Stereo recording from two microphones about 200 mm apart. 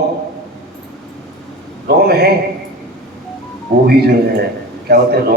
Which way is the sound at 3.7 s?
55° right (ahead or behind).